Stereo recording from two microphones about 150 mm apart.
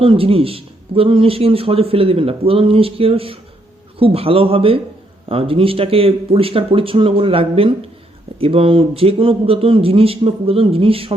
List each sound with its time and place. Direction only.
0.0 s speech: 35° right (ahead or behind)